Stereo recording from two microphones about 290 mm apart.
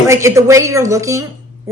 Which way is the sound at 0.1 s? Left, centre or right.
Centre.